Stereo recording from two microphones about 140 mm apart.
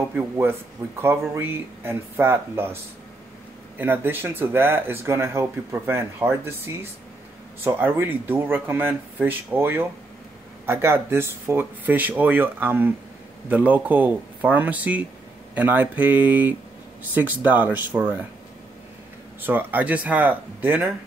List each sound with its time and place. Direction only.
0.1 s speech: 15° right (ahead or behind)
19.4 s speech: 15° right (ahead or behind)